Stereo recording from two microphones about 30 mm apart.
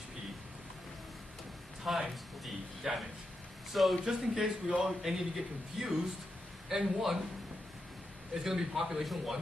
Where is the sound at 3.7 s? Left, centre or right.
Centre.